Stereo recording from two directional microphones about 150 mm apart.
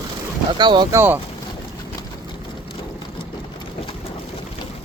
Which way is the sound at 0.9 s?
15° right (ahead or behind).